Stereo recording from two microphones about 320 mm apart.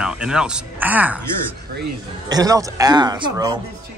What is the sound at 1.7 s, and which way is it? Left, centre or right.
Speech, right.